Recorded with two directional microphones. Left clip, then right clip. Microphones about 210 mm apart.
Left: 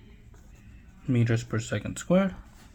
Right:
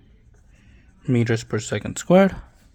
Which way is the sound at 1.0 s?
45° right (ahead or behind).